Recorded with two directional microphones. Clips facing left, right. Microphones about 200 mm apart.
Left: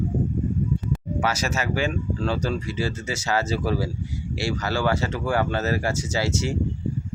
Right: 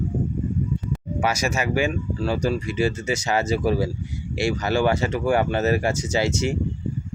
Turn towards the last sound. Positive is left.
turn(degrees=-15)  # may be behind; listen again after turning